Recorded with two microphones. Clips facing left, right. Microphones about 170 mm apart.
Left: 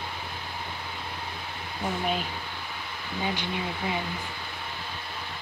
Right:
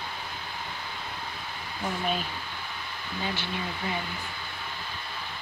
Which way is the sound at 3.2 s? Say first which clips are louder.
Left 3 dB; 15° left (ahead or behind).